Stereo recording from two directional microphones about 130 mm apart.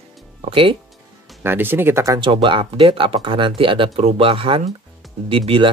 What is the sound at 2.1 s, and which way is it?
Speech, 40° right (ahead or behind).